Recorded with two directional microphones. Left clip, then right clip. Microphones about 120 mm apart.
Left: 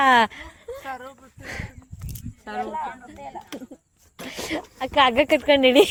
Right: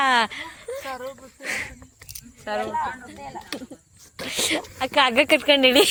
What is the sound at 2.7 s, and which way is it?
Speech, 35° left (ahead or behind).